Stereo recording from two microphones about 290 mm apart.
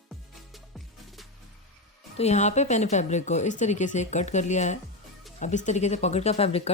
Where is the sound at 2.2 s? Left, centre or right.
Left.